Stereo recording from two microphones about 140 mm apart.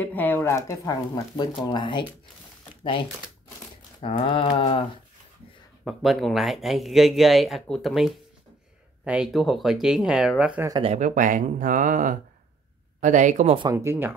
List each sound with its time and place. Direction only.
0.0 s speech: 10° left (ahead or behind)
1.7 s a sound: 35° left (ahead or behind)
2.8 s speech: 40° left (ahead or behind)
4.0 s a sound: 35° left (ahead or behind)
5.9 s speech: centre (ahead or behind)
10.8 s speech: 55° right (ahead or behind)
13.6 s speech: 25° right (ahead or behind)